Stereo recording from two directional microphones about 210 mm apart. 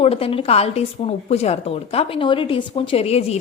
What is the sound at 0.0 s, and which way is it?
A woman's voice, 25° left (ahead or behind).